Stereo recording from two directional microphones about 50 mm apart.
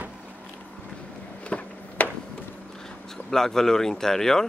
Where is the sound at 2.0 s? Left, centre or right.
Left.